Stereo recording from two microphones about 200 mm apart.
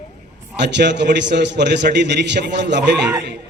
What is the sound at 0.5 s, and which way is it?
A man's voice, 60° right (ahead or behind).